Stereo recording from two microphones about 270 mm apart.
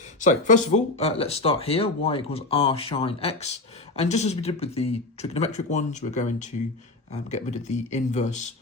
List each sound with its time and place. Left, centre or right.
0.2 s speech: left